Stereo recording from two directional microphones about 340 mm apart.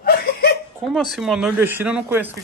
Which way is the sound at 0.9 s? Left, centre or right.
Centre.